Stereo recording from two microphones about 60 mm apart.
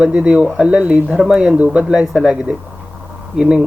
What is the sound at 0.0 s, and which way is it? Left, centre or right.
Speech, centre.